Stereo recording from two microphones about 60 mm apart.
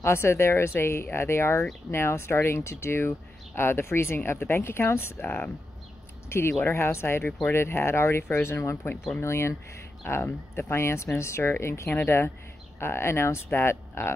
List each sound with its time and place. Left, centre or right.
0.0 s speech: left
5.2 s speech: left
6.2 s speech: left
10.2 s speech: left